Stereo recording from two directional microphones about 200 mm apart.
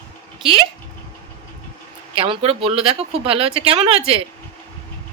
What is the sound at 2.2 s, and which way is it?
Speech, 30° right (ahead or behind).